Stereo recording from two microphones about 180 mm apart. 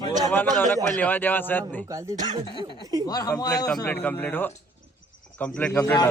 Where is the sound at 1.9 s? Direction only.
15° right (ahead or behind).